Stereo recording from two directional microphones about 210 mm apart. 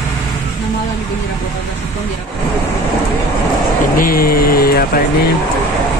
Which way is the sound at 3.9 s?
45° left (ahead or behind).